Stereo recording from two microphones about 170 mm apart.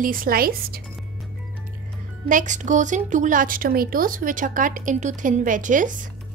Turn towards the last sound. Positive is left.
turn(degrees=-50)  # may be behind; listen again after turning